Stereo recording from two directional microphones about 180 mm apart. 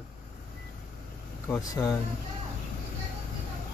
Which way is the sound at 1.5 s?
15° left (ahead or behind).